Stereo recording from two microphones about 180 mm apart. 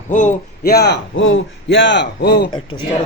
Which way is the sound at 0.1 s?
45° left (ahead or behind).